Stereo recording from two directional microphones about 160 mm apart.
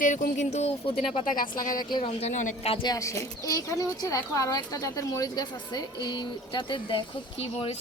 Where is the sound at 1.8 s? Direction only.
30° left (ahead or behind).